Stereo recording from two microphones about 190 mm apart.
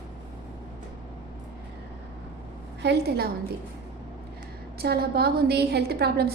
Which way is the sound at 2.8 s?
60° right (ahead or behind).